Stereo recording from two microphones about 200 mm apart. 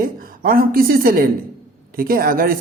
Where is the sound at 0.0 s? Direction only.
45° right (ahead or behind).